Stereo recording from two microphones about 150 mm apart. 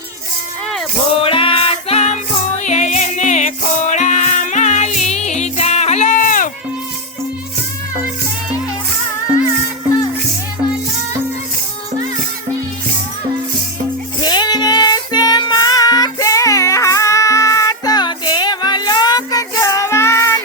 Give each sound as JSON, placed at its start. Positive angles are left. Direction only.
{"t": 1.2, "sound": "music", "side_deg": 35}
{"t": 14.2, "sound": "music", "side_deg": 30}